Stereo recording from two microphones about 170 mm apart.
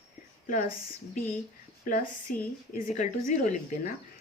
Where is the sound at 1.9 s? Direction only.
55° left (ahead or behind).